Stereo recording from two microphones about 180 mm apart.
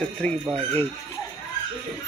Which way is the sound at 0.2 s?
5° left (ahead or behind).